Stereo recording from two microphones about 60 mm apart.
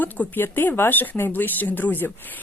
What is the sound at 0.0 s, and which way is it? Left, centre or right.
A woman's voice, left.